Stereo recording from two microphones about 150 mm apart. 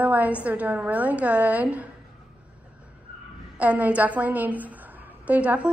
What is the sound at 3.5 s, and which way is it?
A woman's voice, 10° right (ahead or behind).